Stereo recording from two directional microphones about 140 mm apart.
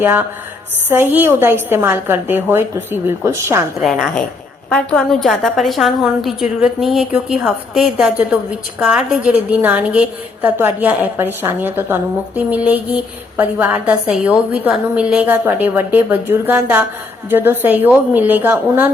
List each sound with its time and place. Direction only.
0.0 s a woman's voice: 15° right (ahead or behind)
3.8 s a woman's voice: centre (ahead or behind)